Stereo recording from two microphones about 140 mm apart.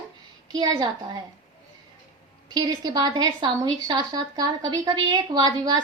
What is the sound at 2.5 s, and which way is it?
A woman's voice, 30° right (ahead or behind).